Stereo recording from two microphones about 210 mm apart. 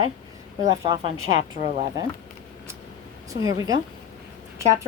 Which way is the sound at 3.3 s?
15° right (ahead or behind).